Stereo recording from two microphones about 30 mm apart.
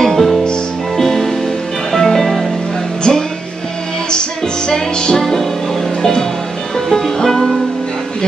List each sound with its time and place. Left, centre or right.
0.0 s music: centre
3.0 s music: left
4.6 s music: left
7.2 s music: centre